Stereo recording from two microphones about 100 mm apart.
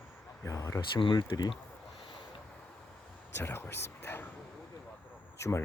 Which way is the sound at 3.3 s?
25° left (ahead or behind).